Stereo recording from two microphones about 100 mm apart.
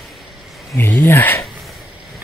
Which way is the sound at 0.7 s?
20° left (ahead or behind).